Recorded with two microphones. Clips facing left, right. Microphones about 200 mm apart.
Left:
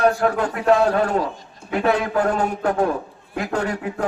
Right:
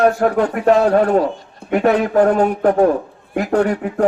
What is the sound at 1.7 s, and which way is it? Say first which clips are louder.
A man's voice: right 5 dB; 45° right (ahead or behind).